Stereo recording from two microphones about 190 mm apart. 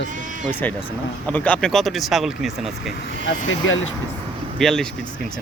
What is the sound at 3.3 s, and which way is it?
Speech, 85° left.